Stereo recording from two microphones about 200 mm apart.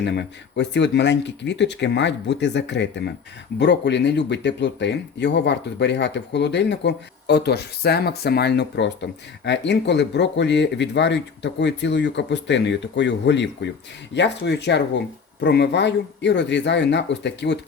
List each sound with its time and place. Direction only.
0.0 s speech: 55° left (ahead or behind)